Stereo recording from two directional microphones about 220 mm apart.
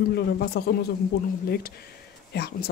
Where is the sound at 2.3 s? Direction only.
45° left (ahead or behind).